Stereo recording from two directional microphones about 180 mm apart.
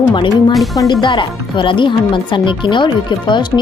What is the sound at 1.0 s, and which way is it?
Speech, 25° left (ahead or behind).